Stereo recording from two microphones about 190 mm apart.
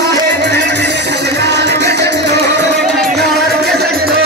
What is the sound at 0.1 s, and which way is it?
Music, 65° right (ahead or behind).